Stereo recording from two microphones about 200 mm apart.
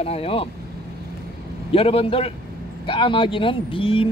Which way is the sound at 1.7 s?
30° left (ahead or behind).